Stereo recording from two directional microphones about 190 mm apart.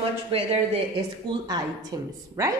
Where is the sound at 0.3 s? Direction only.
30° right (ahead or behind).